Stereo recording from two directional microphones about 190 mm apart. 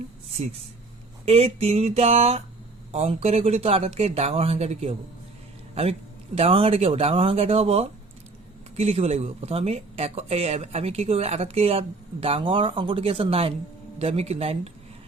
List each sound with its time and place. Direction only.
1.2 s speech: 35° right (ahead or behind)